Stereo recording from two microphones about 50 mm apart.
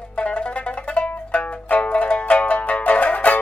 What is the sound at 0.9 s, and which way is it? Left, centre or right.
Zither, left.